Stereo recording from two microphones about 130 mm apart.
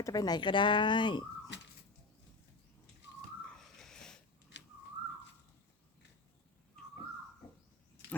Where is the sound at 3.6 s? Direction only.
5° left (ahead or behind).